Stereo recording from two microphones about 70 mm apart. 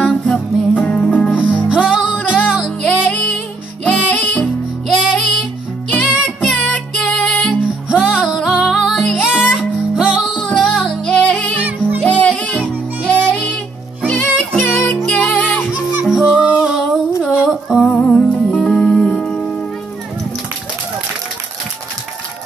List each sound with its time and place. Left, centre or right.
0.0 s music: centre
0.7 s music: centre
1.5 s music: centre
2.8 s music: centre
4.8 s music: centre
7.9 s music: centre
11.1 s music: centre
15.7 s music: centre
16.1 s music: centre
17.8 s music: centre